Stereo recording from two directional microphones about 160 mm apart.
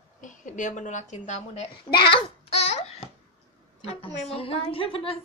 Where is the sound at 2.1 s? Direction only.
35° left (ahead or behind).